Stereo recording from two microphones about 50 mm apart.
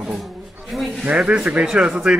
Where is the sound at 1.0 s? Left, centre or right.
Right.